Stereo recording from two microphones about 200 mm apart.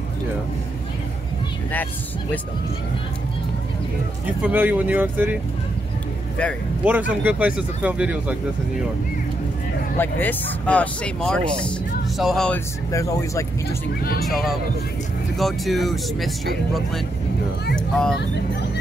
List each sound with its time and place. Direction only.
4.4 s speech: 10° right (ahead or behind)
6.8 s speech: 10° right (ahead or behind)
9.9 s speech: 10° left (ahead or behind)
12.9 s speech: 15° left (ahead or behind)
14.2 s speech: centre (ahead or behind)
17.7 s speech: 5° left (ahead or behind)